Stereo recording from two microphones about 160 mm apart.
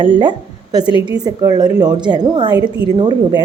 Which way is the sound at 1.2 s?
25° right (ahead or behind).